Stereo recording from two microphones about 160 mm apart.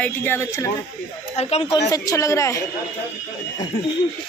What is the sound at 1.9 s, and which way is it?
Speech, 20° left (ahead or behind).